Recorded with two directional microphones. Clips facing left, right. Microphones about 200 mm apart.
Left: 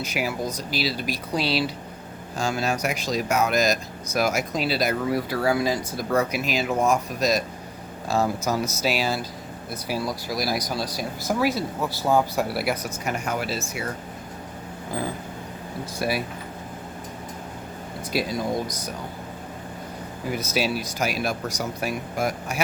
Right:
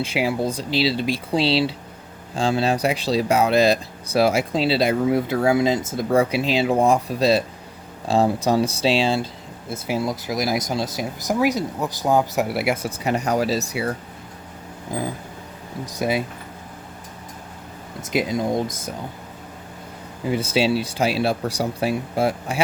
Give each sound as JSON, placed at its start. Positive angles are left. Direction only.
{"t": 0.0, "sound": "speech", "side_deg": -30}
{"t": 14.9, "sound": "vehicle", "side_deg": -15}
{"t": 15.9, "sound": "speech", "side_deg": -20}
{"t": 18.1, "sound": "speech", "side_deg": -20}
{"t": 20.2, "sound": "speech", "side_deg": -30}